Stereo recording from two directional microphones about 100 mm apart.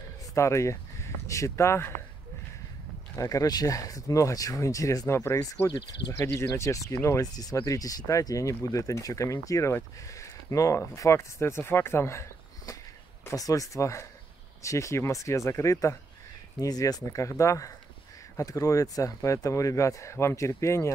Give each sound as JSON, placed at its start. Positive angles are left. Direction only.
{"t": 0.3, "sound": "speech", "side_deg": 30}
{"t": 3.2, "sound": "speech", "side_deg": 35}
{"t": 6.1, "sound": "speech", "side_deg": 25}